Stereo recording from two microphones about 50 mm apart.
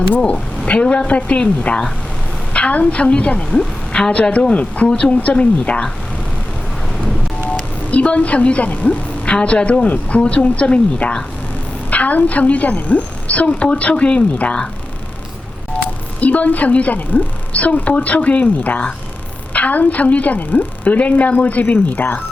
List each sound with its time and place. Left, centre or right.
0.3 s a woman's voice: left
7.9 s a woman's voice: left
16.2 s a woman's voice: left